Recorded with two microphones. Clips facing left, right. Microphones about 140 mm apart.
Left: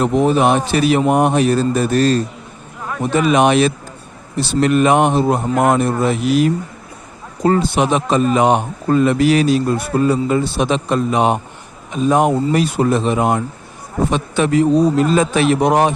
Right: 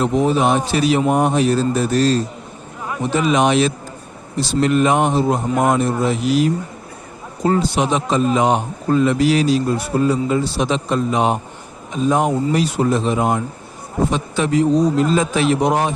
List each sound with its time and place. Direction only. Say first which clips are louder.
0.0 s a man's voice: left 2 dB; 60° left (ahead or behind)